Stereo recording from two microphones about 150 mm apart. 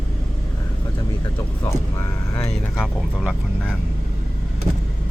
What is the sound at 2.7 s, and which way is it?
Speech, 5° right (ahead or behind).